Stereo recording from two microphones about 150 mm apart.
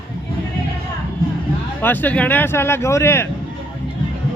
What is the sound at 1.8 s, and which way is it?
Speech, 15° left (ahead or behind).